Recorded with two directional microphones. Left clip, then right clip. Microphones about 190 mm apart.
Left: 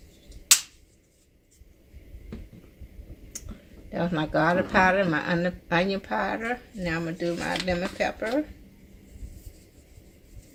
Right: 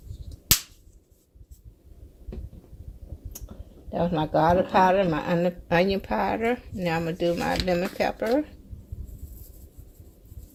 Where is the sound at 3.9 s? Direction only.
20° right (ahead or behind); by 8.4 s 45° right (ahead or behind).